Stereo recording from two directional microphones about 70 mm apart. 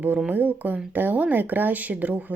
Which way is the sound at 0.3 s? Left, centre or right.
Right.